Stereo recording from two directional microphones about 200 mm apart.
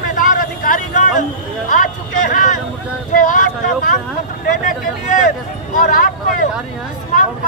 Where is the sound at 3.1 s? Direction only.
40° left (ahead or behind).